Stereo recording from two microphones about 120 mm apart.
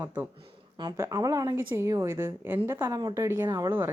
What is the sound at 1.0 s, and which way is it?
A woman's voice, 30° right (ahead or behind).